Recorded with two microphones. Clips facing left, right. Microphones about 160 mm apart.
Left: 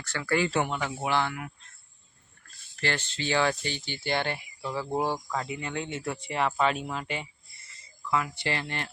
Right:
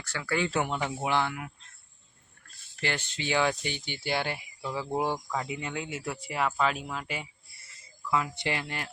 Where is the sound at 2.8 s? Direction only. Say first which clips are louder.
Left 2 dB; 10° right (ahead or behind).